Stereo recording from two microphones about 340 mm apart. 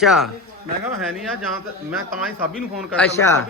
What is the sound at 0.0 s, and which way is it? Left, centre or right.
Speech, centre.